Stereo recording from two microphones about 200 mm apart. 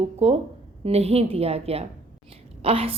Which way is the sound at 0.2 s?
30° right (ahead or behind).